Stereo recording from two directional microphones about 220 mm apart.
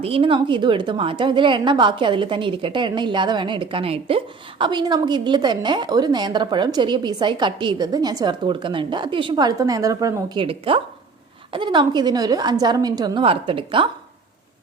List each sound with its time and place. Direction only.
0.0 s a woman's voice: 25° right (ahead or behind)